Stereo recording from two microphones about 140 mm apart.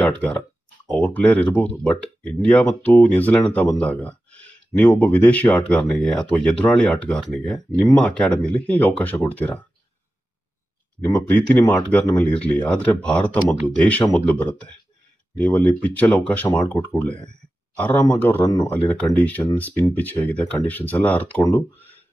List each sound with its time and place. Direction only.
0.8 s speech: 10° left (ahead or behind)
11.1 s speech: 10° left (ahead or behind)
18.4 s speech: 25° left (ahead or behind)
18.7 s speech: 10° left (ahead or behind)